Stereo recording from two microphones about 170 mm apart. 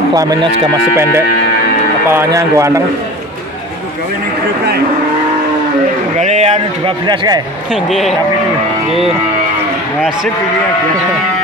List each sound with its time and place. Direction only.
0.1 s speech: 20° right (ahead or behind)
2.0 s speech: 15° right (ahead or behind)
6.1 s speech: 40° right (ahead or behind)